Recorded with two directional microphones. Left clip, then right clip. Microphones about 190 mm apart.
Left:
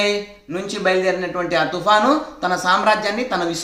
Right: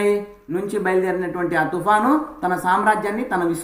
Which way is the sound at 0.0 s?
35° left (ahead or behind).